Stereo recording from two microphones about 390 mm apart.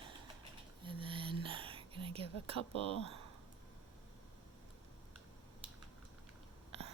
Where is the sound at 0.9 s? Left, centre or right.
Centre.